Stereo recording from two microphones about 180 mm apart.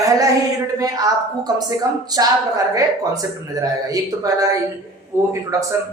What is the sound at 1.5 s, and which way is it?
Speech, 20° right (ahead or behind).